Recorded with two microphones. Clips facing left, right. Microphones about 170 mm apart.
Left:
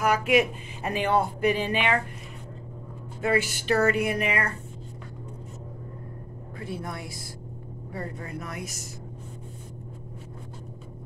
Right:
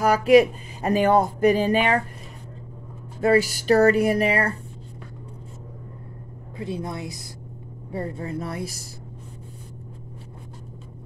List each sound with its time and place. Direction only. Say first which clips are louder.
0.0 s speech: right 7 dB; 35° right (ahead or behind)
3.2 s speech: right 6 dB; 40° right (ahead or behind)
6.6 s a woman's voice: right 5 dB; 20° right (ahead or behind)